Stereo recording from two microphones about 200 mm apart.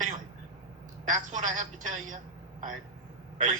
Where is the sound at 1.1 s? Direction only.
40° right (ahead or behind).